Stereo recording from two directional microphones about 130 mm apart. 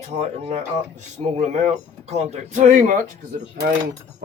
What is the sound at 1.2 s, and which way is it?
Speech, 60° right (ahead or behind).